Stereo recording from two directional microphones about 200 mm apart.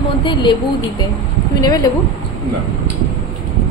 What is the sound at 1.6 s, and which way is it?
Speech, 20° left (ahead or behind).